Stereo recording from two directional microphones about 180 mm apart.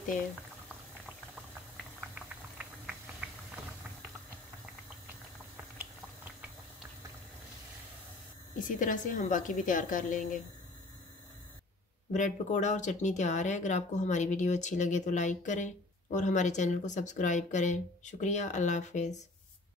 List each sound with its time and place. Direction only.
2.0 s a sound: 5° right (ahead or behind)
8.5 s speech: 45° left (ahead or behind)
12.1 s speech: 40° left (ahead or behind)